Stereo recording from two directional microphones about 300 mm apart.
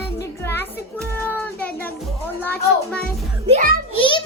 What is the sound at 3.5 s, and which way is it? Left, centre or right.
Speech, right.